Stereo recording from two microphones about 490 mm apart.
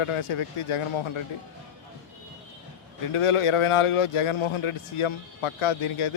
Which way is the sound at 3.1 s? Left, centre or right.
Left.